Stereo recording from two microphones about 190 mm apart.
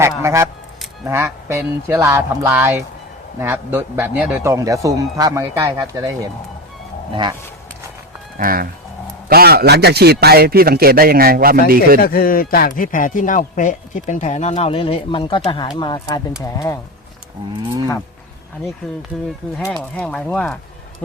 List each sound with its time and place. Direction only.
0.0 s a man's voice: 15° right (ahead or behind)
7.1 s speech: 25° right (ahead or behind)
8.4 s a man's voice: 50° right (ahead or behind)
12.0 s a man's voice: 50° left (ahead or behind); by 16.7 s 20° left (ahead or behind)
19.4 s speech: centre (ahead or behind)